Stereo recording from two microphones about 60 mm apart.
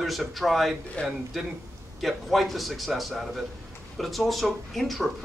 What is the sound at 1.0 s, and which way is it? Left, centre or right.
Speech, centre.